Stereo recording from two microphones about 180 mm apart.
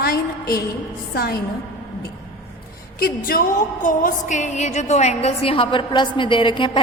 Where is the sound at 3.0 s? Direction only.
55° left (ahead or behind).